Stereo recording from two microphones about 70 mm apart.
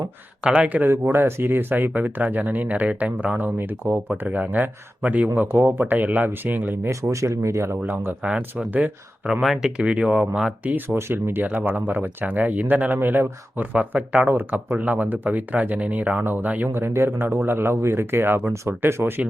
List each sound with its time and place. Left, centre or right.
0.4 s speech: centre
0.9 s speech: right
7.1 s speech: right
7.8 s speech: right
9.4 s speech: centre; by 13.7 s right
13.7 s speech: centre
16.7 s speech: right